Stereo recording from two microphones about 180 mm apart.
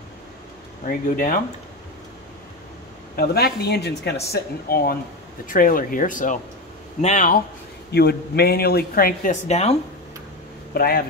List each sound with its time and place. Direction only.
0.8 s speech: 50° left (ahead or behind)
3.2 s speech: 60° left (ahead or behind)
4.3 s speech: 55° left (ahead or behind)
7.9 s speech: 65° left (ahead or behind); by 9.8 s 35° left (ahead or behind)
10.7 s speech: 55° left (ahead or behind)